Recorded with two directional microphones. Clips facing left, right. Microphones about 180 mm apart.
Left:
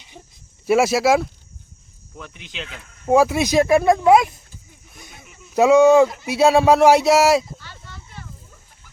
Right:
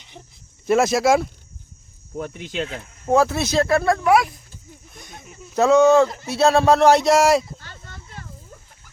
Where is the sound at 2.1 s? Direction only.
45° right (ahead or behind).